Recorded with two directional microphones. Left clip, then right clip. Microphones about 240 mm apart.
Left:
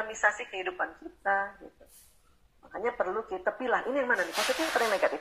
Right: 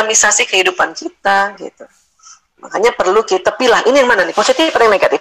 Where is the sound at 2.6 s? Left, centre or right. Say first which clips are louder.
Right 18 dB; right.